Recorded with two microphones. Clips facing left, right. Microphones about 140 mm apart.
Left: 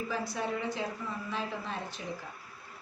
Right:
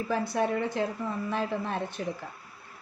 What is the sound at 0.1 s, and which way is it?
Speech, 55° right (ahead or behind).